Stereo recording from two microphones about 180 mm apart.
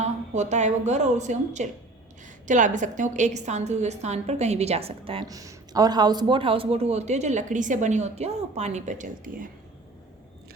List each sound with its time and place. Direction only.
0.0 s a woman's voice: 40° right (ahead or behind)
5.3 s a man's voice: 20° right (ahead or behind); by 9.5 s 45° right (ahead or behind)